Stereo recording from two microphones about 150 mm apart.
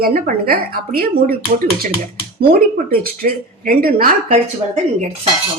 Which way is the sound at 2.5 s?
85° right.